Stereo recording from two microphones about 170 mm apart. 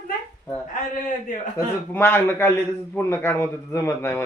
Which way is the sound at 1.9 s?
10° left (ahead or behind).